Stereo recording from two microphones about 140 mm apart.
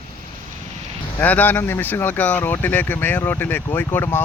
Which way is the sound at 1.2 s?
10° left (ahead or behind).